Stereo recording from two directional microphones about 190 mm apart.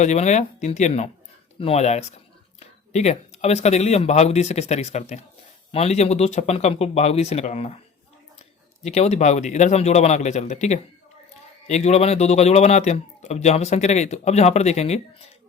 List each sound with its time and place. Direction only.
0.0 s speech: 35° left (ahead or behind)
8.8 s speech: 35° left (ahead or behind)